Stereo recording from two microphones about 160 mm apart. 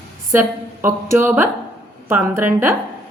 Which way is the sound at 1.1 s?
15° right (ahead or behind).